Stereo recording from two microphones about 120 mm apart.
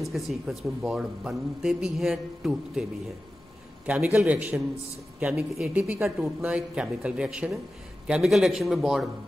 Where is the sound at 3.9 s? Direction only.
15° right (ahead or behind).